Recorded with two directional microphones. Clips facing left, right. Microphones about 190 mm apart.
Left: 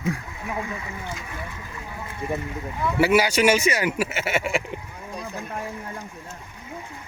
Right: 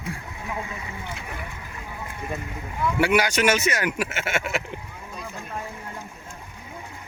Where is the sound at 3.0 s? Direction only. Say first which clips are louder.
Left 3 dB; 5° left (ahead or behind).